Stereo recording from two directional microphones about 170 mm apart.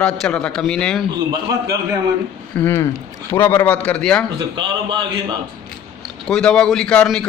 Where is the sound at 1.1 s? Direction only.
20° right (ahead or behind).